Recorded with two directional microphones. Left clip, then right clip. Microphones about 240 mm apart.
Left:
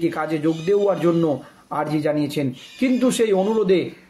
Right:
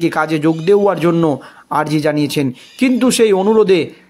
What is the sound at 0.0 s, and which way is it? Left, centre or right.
A man's voice, right.